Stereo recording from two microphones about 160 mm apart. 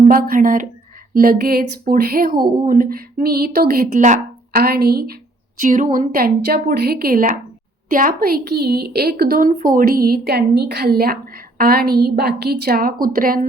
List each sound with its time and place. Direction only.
0.1 s a woman's voice: 65° right (ahead or behind)
1.1 s a woman's voice: 70° right (ahead or behind)
5.5 s a woman's voice: 55° right (ahead or behind)